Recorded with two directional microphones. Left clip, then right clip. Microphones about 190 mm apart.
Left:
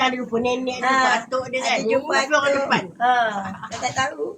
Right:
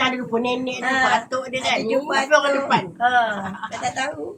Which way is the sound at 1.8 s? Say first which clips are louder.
Left 1 dB; 20° left (ahead or behind).